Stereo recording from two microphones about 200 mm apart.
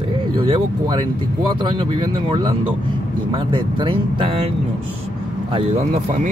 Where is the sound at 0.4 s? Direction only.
25° right (ahead or behind).